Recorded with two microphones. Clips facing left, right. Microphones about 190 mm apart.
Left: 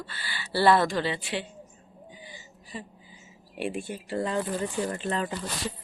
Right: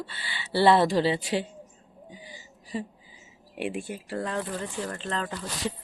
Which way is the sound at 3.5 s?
15° right (ahead or behind).